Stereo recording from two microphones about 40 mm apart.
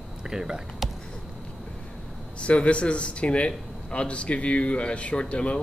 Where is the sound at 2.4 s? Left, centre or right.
Left.